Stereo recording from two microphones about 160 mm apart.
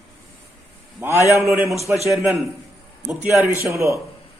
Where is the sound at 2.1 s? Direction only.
Centre (ahead or behind).